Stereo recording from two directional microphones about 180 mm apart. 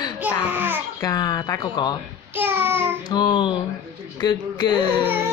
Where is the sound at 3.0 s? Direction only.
25° left (ahead or behind).